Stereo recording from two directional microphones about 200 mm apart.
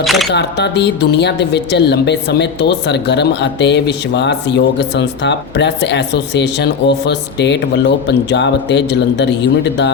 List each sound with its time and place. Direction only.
0.0 s speech: centre (ahead or behind)
0.3 s speech: 55° left (ahead or behind)